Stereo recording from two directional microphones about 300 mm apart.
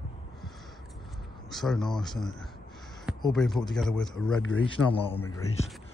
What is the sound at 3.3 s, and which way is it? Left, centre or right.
Speech, centre.